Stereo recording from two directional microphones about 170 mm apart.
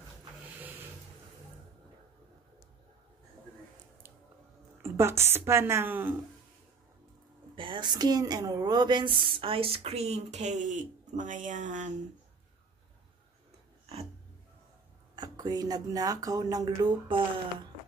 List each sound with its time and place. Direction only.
0.6 s a sound: 10° right (ahead or behind)
4.8 s a woman's voice: 15° right (ahead or behind)
7.5 s a woman's voice: 30° right (ahead or behind); by 11.9 s 45° right (ahead or behind)
15.1 s speech: 25° right (ahead or behind)